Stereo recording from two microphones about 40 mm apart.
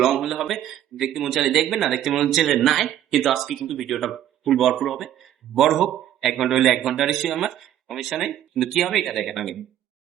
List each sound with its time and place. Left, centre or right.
0.0 s speech: centre